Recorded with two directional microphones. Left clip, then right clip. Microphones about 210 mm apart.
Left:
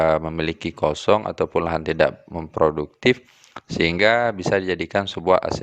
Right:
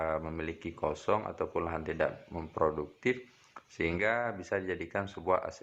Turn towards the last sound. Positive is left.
turn(degrees=40)  # may be behind; listen again after turning